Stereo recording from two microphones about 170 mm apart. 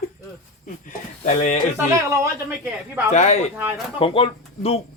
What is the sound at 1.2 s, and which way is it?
Speech, 45° left (ahead or behind).